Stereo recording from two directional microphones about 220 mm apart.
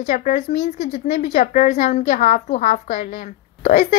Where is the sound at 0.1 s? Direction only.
35° left (ahead or behind).